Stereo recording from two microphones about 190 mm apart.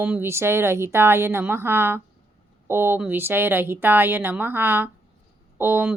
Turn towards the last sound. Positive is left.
turn(degrees=-10)  # may be behind; listen again after turning